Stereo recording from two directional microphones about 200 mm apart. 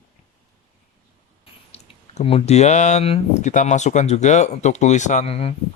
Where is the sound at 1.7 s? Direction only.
30° left (ahead or behind).